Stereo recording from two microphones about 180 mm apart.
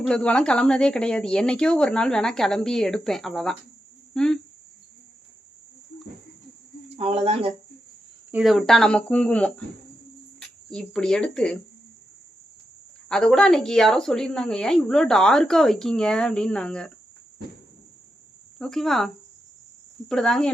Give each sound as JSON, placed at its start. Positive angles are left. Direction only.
{"t": 0.0, "sound": "speech", "side_deg": 5}
{"t": 6.8, "sound": "speech", "side_deg": -35}
{"t": 8.3, "sound": "speech", "side_deg": -5}
{"t": 10.7, "sound": "speech", "side_deg": 5}
{"t": 13.1, "sound": "speech", "side_deg": 5}
{"t": 18.6, "sound": "speech", "side_deg": 0}